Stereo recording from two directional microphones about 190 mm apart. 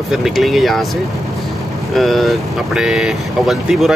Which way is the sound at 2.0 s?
Centre (ahead or behind).